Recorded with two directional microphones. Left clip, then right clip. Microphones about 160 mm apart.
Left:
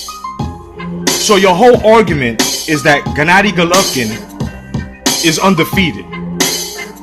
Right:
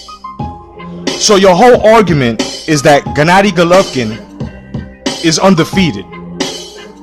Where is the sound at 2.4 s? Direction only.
Centre (ahead or behind).